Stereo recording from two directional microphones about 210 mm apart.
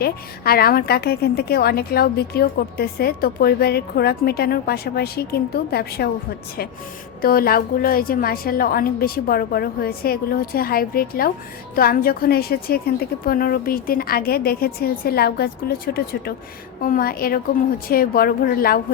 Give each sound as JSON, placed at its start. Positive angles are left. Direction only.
{"t": 0.0, "sound": "a woman's voice", "side_deg": 45}
{"t": 7.2, "sound": "a woman's voice", "side_deg": 45}
{"t": 16.8, "sound": "a woman's voice", "side_deg": 45}